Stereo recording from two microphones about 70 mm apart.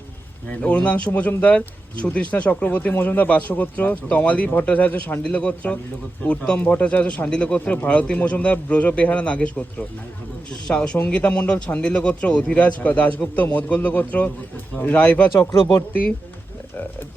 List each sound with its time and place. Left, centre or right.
0.4 s speech: centre
10.7 s speech: centre